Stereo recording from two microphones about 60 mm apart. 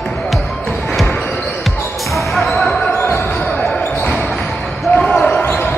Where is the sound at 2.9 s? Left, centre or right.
Left.